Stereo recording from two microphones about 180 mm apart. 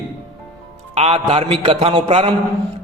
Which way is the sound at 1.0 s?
35° right (ahead or behind).